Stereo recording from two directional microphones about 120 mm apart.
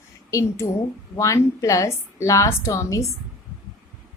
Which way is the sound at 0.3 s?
25° left (ahead or behind).